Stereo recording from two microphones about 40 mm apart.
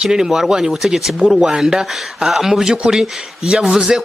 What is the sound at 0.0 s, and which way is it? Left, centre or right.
Speech, centre.